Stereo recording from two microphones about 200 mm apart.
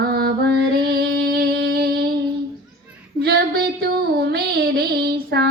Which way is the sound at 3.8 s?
55° right (ahead or behind).